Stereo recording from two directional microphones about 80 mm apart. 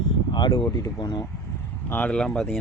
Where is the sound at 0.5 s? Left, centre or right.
Left.